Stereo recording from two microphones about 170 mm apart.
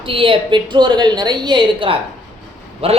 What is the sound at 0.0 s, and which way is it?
A woman's voice, 30° right (ahead or behind).